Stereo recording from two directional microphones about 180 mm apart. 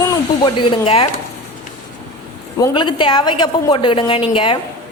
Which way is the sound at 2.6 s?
25° left (ahead or behind).